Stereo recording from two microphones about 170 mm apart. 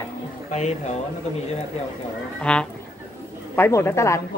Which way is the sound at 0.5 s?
45° left (ahead or behind).